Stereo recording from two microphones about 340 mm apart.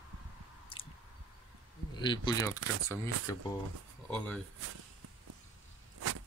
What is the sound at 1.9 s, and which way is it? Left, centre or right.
Speech, centre.